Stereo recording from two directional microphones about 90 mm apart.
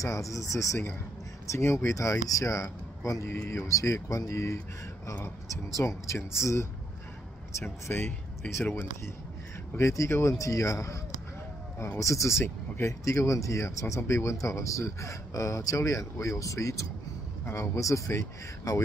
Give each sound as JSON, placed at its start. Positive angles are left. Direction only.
{"t": 0.0, "sound": "speech", "side_deg": 35}
{"t": 3.3, "sound": "speech", "side_deg": 25}
{"t": 5.8, "sound": "speech", "side_deg": 35}
{"t": 9.8, "sound": "speech", "side_deg": 35}
{"t": 12.0, "sound": "speech", "side_deg": 35}